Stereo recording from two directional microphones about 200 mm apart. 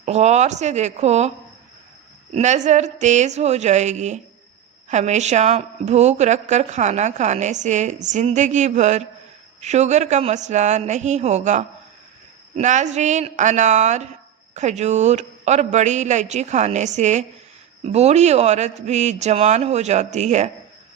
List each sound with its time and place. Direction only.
0.0 s a woman's voice: 35° right (ahead or behind)
2.3 s a woman's voice: 35° right (ahead or behind)